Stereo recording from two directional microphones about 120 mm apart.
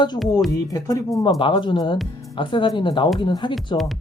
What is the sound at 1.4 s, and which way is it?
Speech, 45° left (ahead or behind).